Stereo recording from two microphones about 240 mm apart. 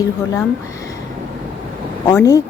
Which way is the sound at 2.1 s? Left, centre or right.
Centre.